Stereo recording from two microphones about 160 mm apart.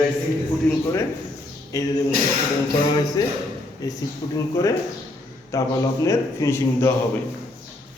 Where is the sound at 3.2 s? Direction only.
20° left (ahead or behind).